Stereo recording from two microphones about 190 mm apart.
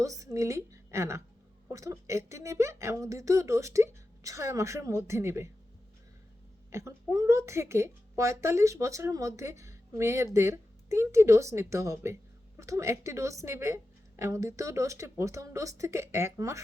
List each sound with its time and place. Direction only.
0.0 s a woman's voice: 15° right (ahead or behind)
6.7 s a woman's voice: 15° right (ahead or behind)